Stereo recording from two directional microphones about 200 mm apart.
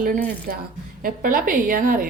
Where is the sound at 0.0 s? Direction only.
40° right (ahead or behind).